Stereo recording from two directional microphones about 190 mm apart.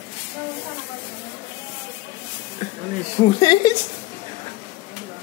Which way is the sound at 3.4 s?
20° left (ahead or behind).